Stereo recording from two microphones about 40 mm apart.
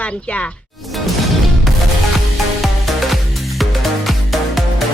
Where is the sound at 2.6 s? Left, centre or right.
Centre.